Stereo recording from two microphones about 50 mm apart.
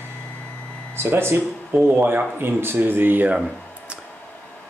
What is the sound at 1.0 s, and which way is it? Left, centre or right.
Speech, right.